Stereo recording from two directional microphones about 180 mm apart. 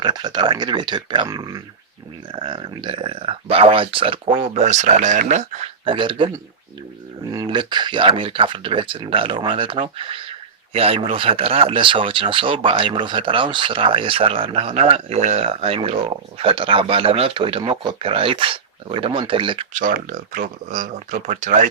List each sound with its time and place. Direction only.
0.0 s speech: 25° right (ahead or behind)
19.7 s speech: 50° right (ahead or behind)